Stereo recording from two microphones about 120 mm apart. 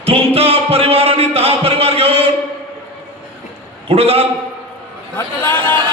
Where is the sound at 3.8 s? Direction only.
55° right (ahead or behind).